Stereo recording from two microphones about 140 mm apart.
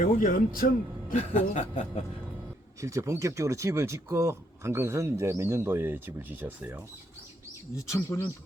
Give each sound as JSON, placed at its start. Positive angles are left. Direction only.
{"t": 0.0, "sound": "speech", "side_deg": 75}
{"t": 1.1, "sound": "speech", "side_deg": 50}
{"t": 2.8, "sound": "speech", "side_deg": -20}
{"t": 7.8, "sound": "speech", "side_deg": 20}